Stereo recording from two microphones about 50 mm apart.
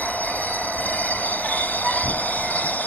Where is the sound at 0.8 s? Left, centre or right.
Left.